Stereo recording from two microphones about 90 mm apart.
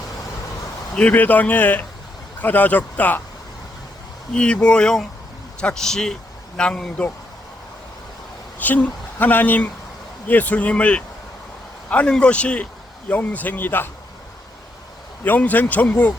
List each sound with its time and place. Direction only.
0.9 s speech: 15° left (ahead or behind)
4.4 s speech: 10° left (ahead or behind)
8.5 s speech: 20° left (ahead or behind)
15.2 s speech: 20° left (ahead or behind)